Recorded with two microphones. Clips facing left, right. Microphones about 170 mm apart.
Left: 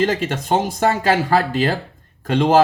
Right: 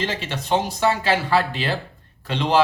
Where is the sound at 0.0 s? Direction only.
45° left (ahead or behind).